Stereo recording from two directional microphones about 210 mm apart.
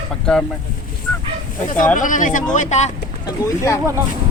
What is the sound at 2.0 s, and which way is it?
Speech, 40° left (ahead or behind).